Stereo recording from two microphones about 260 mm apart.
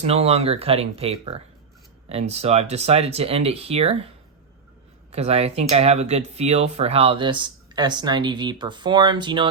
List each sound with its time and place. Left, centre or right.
0.0 s speech: right
5.1 s speech: right